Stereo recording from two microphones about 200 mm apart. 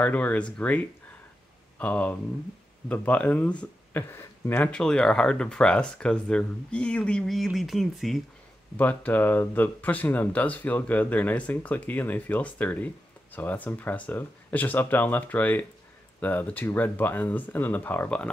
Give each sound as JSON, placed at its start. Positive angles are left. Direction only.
{"t": 0.0, "sound": "speech", "side_deg": 5}